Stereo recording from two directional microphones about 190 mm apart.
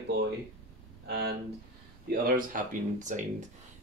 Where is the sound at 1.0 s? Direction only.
60° right (ahead or behind).